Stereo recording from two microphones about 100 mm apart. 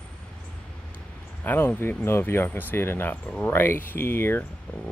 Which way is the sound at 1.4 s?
20° left (ahead or behind).